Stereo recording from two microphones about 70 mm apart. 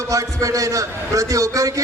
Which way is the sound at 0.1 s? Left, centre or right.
Right.